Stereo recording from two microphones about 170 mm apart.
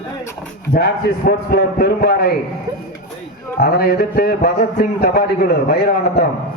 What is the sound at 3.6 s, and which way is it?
A man's voice, 60° left (ahead or behind).